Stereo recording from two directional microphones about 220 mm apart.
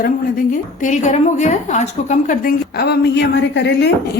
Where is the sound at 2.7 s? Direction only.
50° left (ahead or behind).